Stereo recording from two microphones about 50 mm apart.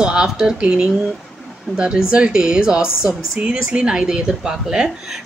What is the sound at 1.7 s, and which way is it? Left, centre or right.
A woman's voice, centre.